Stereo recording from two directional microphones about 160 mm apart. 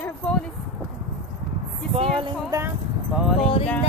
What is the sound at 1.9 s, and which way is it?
Speech, 35° right (ahead or behind).